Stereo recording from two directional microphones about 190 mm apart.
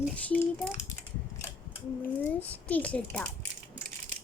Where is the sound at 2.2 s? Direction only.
10° left (ahead or behind).